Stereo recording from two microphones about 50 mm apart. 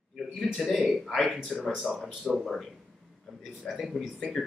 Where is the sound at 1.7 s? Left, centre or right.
Centre.